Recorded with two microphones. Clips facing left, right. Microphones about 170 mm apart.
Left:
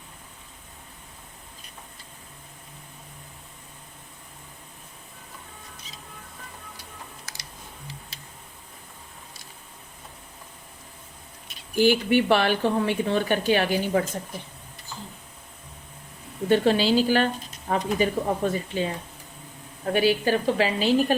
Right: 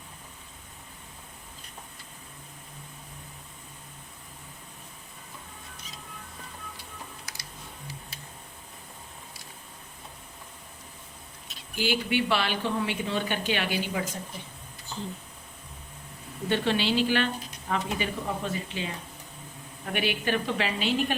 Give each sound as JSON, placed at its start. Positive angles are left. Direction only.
{"t": 11.7, "sound": "speech", "side_deg": 50}
{"t": 16.5, "sound": "a woman's voice", "side_deg": 40}
{"t": 19.9, "sound": "a woman's voice", "side_deg": 35}